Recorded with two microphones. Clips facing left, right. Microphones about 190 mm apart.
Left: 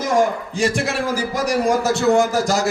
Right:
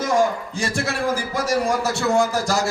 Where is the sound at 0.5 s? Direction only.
20° left (ahead or behind).